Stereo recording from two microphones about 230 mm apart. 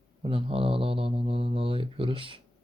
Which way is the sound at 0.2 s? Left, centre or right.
Right.